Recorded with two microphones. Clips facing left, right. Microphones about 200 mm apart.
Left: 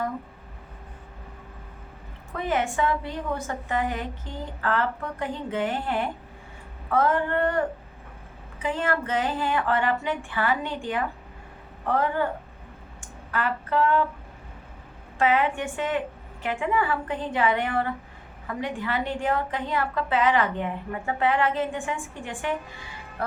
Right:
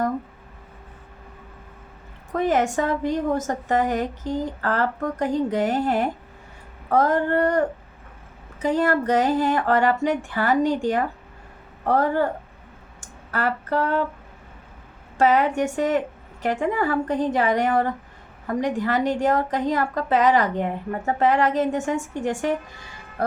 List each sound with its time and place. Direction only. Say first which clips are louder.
2.3 s a woman's voice: right 6 dB; 45° right (ahead or behind)
13.3 s a woman's voice: right 2 dB; 40° right (ahead or behind)
15.2 s a woman's voice: right 4 dB; 40° right (ahead or behind)